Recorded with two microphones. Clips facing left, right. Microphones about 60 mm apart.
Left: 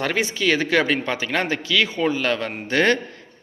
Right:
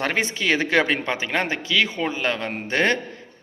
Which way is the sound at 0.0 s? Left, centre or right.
Right.